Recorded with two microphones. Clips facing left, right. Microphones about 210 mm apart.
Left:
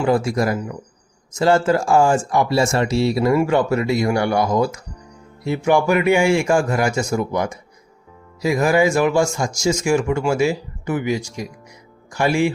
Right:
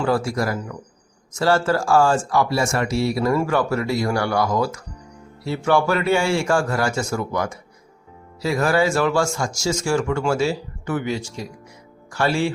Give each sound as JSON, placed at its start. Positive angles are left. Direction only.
{"t": 0.0, "sound": "a man's voice", "side_deg": 20}